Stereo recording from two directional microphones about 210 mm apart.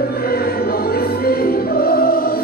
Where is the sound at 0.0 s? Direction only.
45° left (ahead or behind).